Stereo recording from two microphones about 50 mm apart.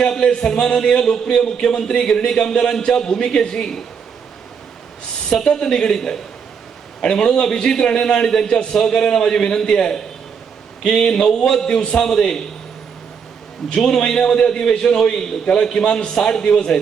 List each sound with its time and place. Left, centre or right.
0.1 s a man's voice: centre
5.3 s a man's voice: centre
13.7 s a man's voice: centre